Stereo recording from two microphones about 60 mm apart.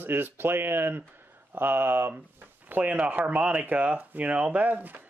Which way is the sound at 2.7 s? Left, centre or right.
Right.